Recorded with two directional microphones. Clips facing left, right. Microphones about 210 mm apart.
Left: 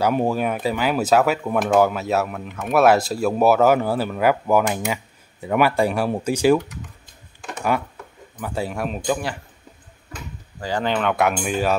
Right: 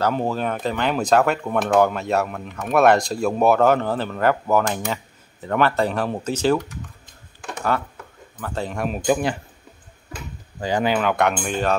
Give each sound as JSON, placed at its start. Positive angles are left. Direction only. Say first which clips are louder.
{"t": 0.0, "sound": "speech", "louder": "left 2 dB", "side_deg": 15}
{"t": 8.4, "sound": "speech", "louder": "left 1 dB", "side_deg": 10}
{"t": 9.0, "sound": "speech", "louder": "right 5 dB", "side_deg": -15}
{"t": 10.6, "sound": "speech", "louder": "right 2 dB", "side_deg": -15}